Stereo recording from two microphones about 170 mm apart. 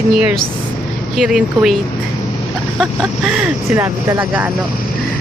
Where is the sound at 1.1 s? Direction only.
5° right (ahead or behind).